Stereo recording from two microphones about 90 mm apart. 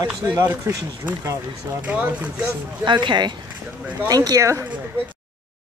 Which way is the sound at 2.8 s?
60° right (ahead or behind).